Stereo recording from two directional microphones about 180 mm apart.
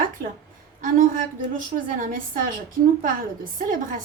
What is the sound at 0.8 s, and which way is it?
A woman's voice, 50° right (ahead or behind).